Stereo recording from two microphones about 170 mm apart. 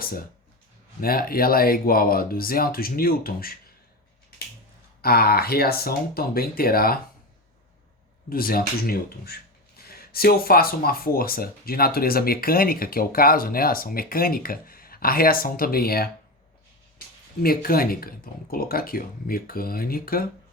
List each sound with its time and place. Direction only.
1.0 s speech: 60° left (ahead or behind)
5.0 s speech: 65° left (ahead or behind)
8.3 s speech: 60° left (ahead or behind)
17.4 s speech: 60° left (ahead or behind)